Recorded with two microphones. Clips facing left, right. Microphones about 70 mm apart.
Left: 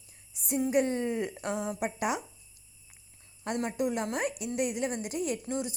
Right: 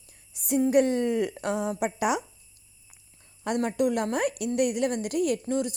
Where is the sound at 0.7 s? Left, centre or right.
Right.